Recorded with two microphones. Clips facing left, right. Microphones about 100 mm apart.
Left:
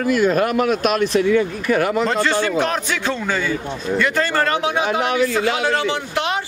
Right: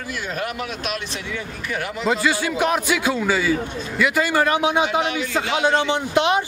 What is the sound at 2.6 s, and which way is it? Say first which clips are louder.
A man's voice: right 1 dB; 10° right (ahead or behind).